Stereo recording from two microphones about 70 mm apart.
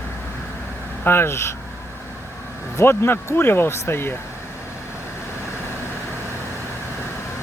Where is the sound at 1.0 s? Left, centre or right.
Left.